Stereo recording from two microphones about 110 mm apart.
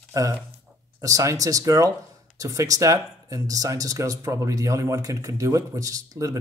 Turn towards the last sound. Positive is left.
turn(degrees=-30)  # may be behind; listen again after turning